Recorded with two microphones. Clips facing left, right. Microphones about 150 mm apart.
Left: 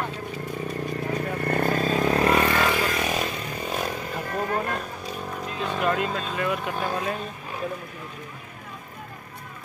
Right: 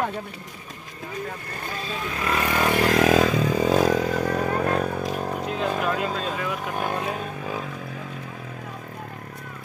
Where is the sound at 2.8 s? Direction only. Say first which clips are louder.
Right 8 dB; 90° right.